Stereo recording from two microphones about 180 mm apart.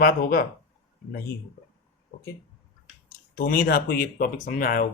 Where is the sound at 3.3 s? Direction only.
55° left (ahead or behind).